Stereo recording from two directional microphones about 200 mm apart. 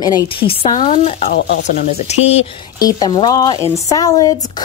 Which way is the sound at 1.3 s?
60° left (ahead or behind).